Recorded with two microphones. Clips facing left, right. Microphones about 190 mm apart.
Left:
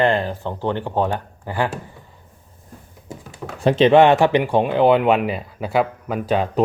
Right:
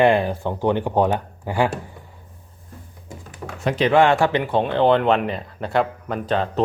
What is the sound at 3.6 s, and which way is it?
Speech, 25° left (ahead or behind).